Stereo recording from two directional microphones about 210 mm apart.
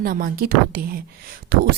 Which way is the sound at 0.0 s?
45° right (ahead or behind).